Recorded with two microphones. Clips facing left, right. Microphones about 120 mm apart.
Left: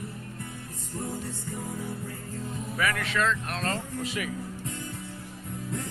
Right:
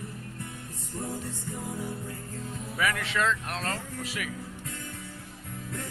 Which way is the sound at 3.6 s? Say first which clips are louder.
Left 3 dB; centre (ahead or behind).